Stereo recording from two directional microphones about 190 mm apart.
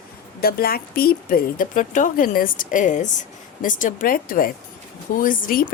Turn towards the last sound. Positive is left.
turn(degrees=45)  # may be behind; listen again after turning